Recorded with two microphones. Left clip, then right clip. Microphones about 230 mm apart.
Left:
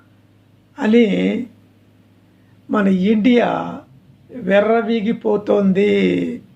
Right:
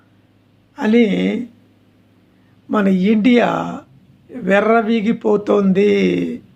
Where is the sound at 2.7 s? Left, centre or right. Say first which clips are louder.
Right 1 dB; centre.